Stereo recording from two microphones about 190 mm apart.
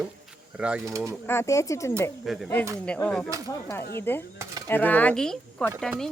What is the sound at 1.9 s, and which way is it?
Speech, centre (ahead or behind).